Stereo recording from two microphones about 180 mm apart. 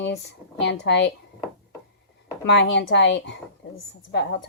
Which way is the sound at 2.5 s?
80° left.